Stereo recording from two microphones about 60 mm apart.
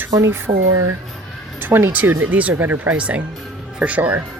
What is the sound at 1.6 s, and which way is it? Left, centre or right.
Speech, right.